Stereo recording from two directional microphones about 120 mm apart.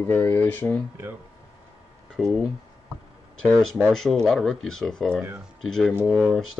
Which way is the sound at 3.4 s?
Centre (ahead or behind).